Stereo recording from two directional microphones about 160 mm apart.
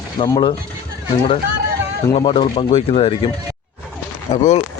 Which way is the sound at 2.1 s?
30° left (ahead or behind).